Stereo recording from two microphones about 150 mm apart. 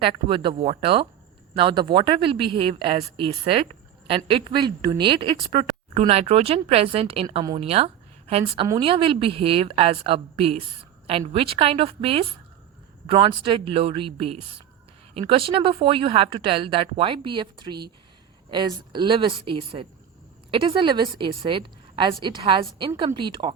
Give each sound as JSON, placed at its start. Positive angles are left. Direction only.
{"t": 0.0, "sound": "a woman's voice", "side_deg": -35}